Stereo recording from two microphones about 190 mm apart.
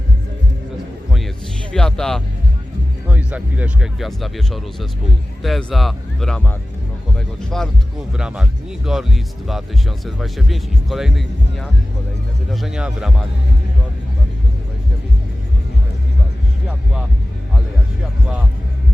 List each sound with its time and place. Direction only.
1.7 s music: 5° left (ahead or behind)
3.1 s speech: 5° right (ahead or behind)